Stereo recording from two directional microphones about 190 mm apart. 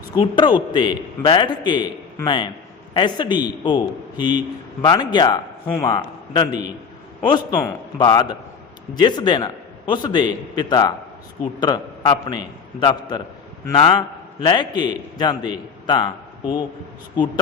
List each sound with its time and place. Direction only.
0.1 s a man's voice: 25° left (ahead or behind)